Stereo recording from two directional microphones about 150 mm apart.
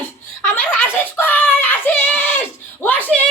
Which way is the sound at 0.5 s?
15° left (ahead or behind).